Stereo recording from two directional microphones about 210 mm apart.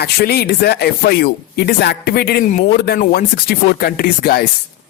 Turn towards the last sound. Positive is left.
turn(degrees=45)  # may be behind; listen again after turning